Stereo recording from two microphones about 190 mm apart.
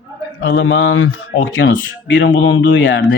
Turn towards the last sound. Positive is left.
turn(degrees=75)  # may be behind; listen again after turning